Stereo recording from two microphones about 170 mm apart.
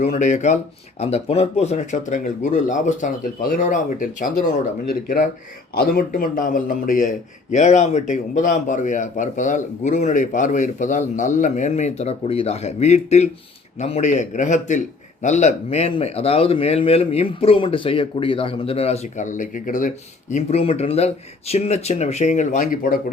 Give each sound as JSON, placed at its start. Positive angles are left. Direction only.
{"t": 0.0, "sound": "a man's voice", "side_deg": 45}
{"t": 20.3, "sound": "a man's voice", "side_deg": 35}